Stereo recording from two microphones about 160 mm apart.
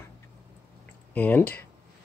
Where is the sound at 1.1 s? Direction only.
10° left (ahead or behind).